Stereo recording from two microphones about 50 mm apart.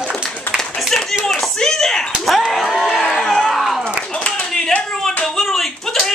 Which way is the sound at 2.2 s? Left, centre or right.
Centre.